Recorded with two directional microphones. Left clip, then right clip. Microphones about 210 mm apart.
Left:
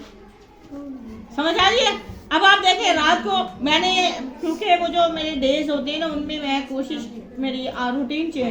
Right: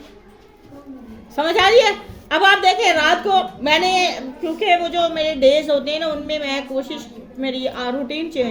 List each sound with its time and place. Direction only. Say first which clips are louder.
1.4 s a woman's voice: right 4 dB; 55° right (ahead or behind)